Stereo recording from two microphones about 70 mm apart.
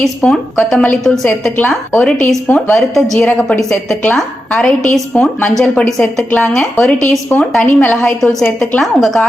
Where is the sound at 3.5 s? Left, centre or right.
Centre.